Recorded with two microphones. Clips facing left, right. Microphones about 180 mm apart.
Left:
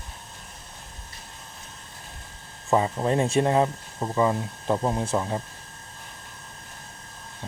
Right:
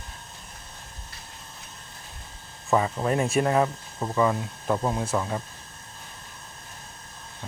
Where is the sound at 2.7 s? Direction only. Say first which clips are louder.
Left 1 dB; 25° left (ahead or behind).